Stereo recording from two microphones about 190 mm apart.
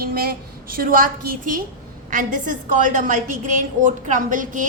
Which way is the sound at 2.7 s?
40° right (ahead or behind).